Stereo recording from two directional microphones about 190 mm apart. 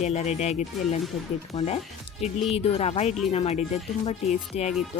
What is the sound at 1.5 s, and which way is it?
Speech, 35° left (ahead or behind).